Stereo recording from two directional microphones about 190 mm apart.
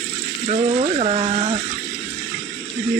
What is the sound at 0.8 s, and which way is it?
Speech, 30° right (ahead or behind).